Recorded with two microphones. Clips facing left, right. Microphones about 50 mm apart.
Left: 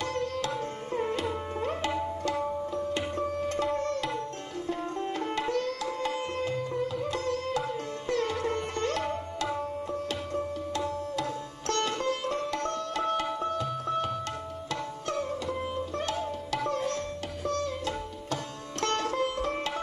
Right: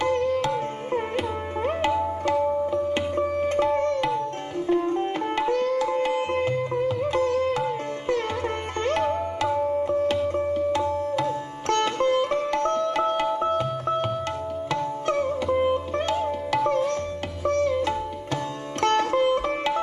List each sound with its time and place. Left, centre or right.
0.0 s music: right
4.6 s sitar: right
14.7 s music: right
17.5 s sitar: right
18.9 s music: right